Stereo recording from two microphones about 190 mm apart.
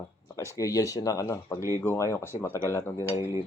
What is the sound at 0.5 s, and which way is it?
Speech, 15° left (ahead or behind).